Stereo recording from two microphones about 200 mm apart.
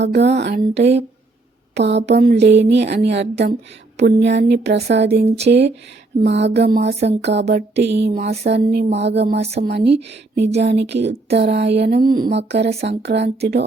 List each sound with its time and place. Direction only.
0.0 s speech: 60° right (ahead or behind)